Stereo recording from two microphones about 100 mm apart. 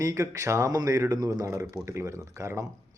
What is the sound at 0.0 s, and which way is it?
Speech, 30° right (ahead or behind).